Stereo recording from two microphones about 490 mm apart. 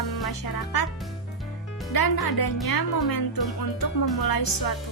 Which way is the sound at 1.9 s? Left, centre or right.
Left.